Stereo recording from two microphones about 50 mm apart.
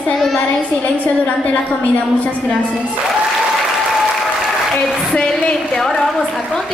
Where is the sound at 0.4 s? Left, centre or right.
Left.